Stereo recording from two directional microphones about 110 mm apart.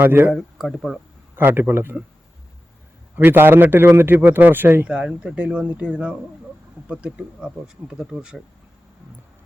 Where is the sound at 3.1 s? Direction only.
20° right (ahead or behind).